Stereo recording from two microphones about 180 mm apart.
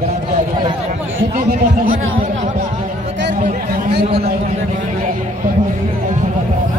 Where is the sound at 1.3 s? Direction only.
50° right (ahead or behind).